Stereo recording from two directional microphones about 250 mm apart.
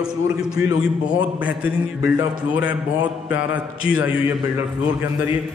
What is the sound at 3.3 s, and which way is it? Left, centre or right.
Mantra, left.